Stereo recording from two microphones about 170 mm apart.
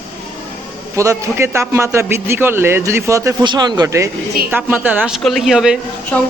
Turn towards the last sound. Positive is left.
turn(degrees=10)  # may be behind; listen again after turning